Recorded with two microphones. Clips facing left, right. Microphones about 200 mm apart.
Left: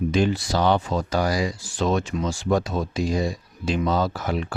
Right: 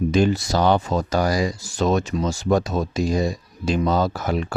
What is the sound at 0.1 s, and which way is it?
Speech, 45° right (ahead or behind).